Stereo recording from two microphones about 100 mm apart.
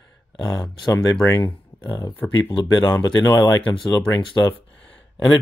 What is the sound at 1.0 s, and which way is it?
Speech, 35° left (ahead or behind).